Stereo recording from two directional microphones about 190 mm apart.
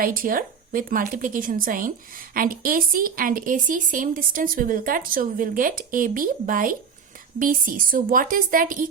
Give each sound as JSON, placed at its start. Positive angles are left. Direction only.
{"t": 0.0, "sound": "a woman's voice", "side_deg": -50}